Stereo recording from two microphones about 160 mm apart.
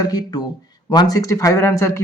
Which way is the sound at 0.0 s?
25° left (ahead or behind).